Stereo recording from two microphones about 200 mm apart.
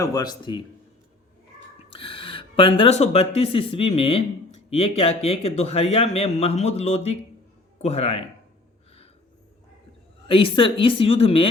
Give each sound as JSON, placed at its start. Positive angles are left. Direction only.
{"t": 0.0, "sound": "speech", "side_deg": 20}
{"t": 1.9, "sound": "speech", "side_deg": 25}
{"t": 10.2, "sound": "speech", "side_deg": 25}